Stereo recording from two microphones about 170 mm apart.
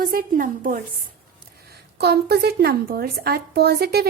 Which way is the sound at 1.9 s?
70° right (ahead or behind).